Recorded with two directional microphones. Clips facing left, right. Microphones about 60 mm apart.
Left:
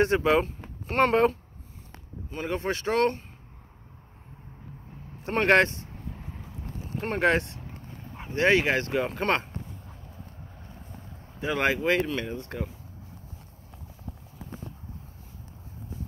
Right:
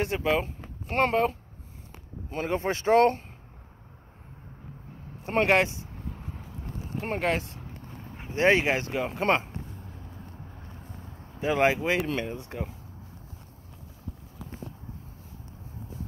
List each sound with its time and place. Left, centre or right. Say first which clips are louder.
0.0 s speech: left 4 dB; centre
2.3 s speech: right 1 dB; right
5.2 s speech: left 2 dB; centre
7.0 s speech: left 4 dB; centre
8.3 s speech: even; right
8.9 s speech: left 2 dB; centre
9.2 s speech: right 5 dB; centre
11.4 s speech: right 1 dB; centre